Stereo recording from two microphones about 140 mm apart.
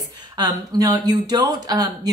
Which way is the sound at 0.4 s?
25° right (ahead or behind).